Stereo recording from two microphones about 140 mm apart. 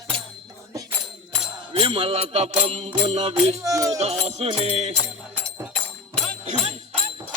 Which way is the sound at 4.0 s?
50° right (ahead or behind).